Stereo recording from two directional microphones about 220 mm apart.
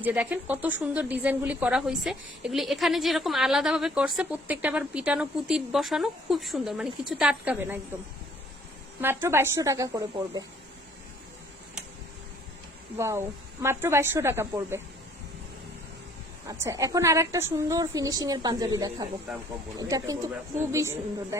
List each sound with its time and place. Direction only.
0.0 s speech: 10° right (ahead or behind)
9.0 s a woman's voice: 10° right (ahead or behind)
13.0 s a woman's voice: 10° right (ahead or behind)
16.5 s a woman's voice: 15° right (ahead or behind)